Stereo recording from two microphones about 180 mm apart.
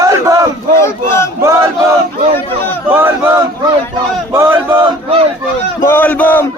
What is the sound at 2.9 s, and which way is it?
Chant, 10° right (ahead or behind).